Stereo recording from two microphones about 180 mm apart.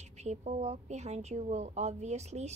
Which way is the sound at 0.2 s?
40° right (ahead or behind).